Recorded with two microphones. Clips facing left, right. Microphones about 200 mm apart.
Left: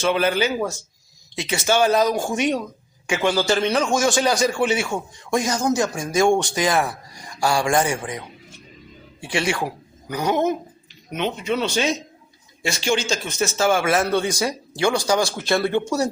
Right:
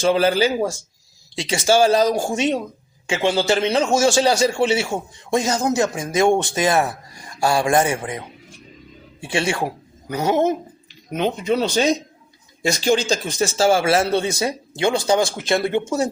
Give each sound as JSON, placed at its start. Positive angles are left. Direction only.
{"t": 0.0, "sound": "a man's voice", "side_deg": -35}
{"t": 9.2, "sound": "a man's voice", "side_deg": -25}